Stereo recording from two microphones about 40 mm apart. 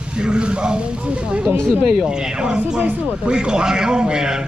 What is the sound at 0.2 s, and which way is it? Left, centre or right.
Speech, right.